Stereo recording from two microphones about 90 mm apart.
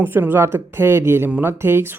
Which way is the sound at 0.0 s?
25° right (ahead or behind).